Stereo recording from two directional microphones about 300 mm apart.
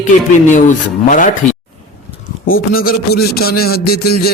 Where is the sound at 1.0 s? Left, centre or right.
Left.